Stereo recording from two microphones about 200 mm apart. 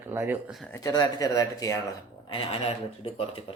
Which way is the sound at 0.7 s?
20° left (ahead or behind).